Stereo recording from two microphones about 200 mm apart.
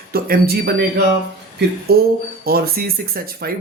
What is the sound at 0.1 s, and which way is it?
Speech, 50° right (ahead or behind).